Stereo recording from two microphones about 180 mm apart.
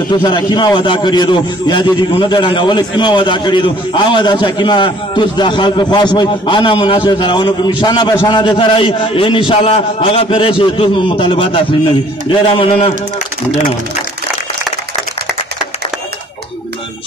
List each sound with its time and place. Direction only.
0.1 s a man's voice: 25° left (ahead or behind)